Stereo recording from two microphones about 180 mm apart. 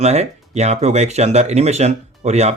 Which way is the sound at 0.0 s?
40° right (ahead or behind).